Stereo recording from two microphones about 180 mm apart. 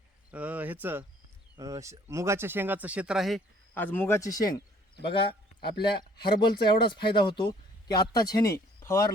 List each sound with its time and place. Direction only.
0.3 s speech: 10° right (ahead or behind)
3.8 s speech: 10° left (ahead or behind)
5.1 s a sound: 30° left (ahead or behind)
6.0 s speech: 25° left (ahead or behind)